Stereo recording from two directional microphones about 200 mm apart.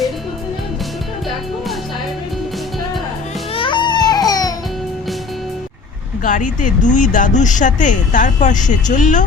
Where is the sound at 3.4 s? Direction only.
25° left (ahead or behind).